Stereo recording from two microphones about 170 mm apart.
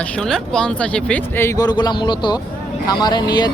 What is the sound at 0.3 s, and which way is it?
Speech, 5° left (ahead or behind).